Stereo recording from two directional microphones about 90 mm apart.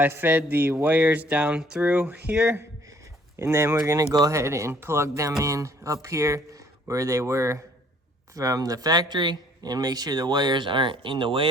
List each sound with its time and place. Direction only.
0.0 s speech: 20° right (ahead or behind)
3.3 s speech: 30° right (ahead or behind); by 11.4 s 70° right (ahead or behind)